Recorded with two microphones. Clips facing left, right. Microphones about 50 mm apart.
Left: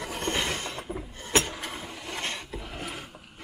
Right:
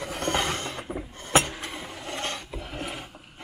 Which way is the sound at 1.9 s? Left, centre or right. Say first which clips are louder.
Right 2 dB; right.